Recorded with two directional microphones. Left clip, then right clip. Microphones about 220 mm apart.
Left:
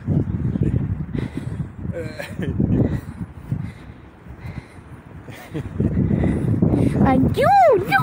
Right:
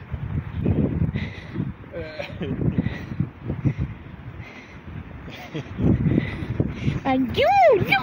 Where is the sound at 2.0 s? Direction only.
30° left (ahead or behind).